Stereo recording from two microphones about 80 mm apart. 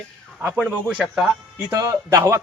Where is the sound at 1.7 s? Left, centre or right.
Right.